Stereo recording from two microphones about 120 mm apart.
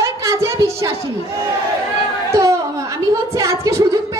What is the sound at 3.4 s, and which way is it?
Speech, 25° right (ahead or behind).